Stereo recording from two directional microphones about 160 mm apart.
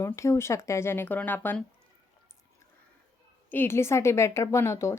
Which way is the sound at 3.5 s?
15° left (ahead or behind).